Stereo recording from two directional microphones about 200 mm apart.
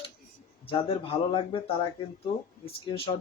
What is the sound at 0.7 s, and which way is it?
Speech, 25° left (ahead or behind).